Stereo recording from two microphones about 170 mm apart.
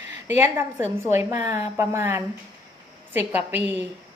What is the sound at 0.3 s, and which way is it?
A woman's voice, 15° right (ahead or behind).